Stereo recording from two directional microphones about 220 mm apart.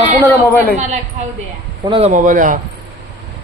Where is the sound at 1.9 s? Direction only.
25° right (ahead or behind).